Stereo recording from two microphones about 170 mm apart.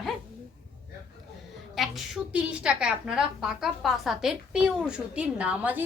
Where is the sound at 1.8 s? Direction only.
5° right (ahead or behind).